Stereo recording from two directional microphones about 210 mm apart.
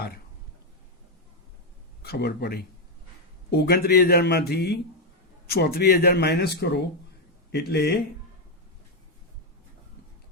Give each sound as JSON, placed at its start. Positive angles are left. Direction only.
{"t": 2.0, "sound": "a man's voice", "side_deg": 50}